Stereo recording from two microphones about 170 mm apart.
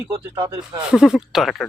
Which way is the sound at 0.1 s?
20° right (ahead or behind).